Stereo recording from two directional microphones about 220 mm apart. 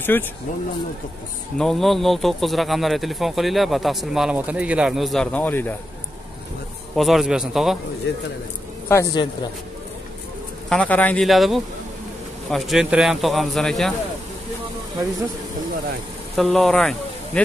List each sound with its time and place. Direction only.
0.1 s a woman's voice: 10° left (ahead or behind)
1.6 s speech: centre (ahead or behind)
7.0 s speech: centre (ahead or behind)
8.1 s speech: 50° left (ahead or behind)
8.8 s a woman's voice: 15° left (ahead or behind)
10.7 s speech: 5° left (ahead or behind)
16.3 s speech: centre (ahead or behind)